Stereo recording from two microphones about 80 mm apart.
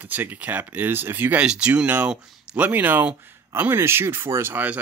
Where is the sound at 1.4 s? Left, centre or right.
Centre.